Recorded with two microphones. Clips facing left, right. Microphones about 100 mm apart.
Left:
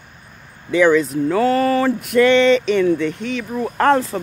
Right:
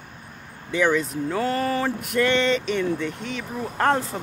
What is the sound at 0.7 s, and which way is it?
Speech, 90° left.